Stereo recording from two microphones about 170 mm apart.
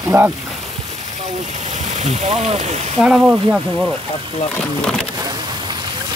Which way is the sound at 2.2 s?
40° right (ahead or behind).